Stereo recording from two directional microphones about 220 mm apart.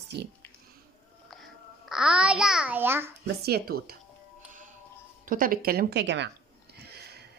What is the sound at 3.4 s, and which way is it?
Speech, 45° right (ahead or behind).